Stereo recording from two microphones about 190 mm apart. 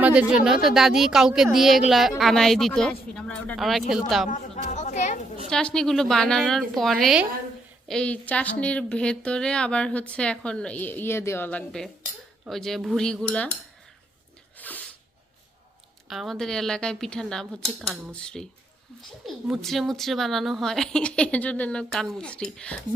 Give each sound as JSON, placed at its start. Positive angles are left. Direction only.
{"t": 0.0, "sound": "speech", "side_deg": -5}
{"t": 4.7, "sound": "chatter", "side_deg": 40}
{"t": 5.5, "sound": "speech", "side_deg": 5}
{"t": 14.6, "sound": "sneeze", "side_deg": 10}
{"t": 16.0, "sound": "speech", "side_deg": 0}